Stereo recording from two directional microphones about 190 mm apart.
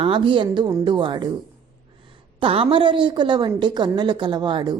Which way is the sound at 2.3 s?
30° right (ahead or behind).